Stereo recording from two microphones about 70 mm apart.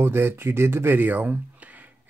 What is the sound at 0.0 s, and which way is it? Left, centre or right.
Speech, right.